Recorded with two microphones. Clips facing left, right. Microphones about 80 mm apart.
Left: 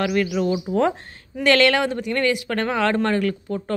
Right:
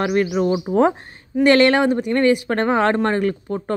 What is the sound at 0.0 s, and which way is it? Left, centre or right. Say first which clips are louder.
A woman's voice: right 3 dB; right.